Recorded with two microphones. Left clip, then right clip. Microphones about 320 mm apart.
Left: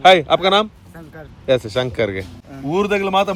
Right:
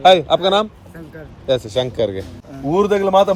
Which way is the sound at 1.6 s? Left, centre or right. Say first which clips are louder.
Right 1 dB; centre.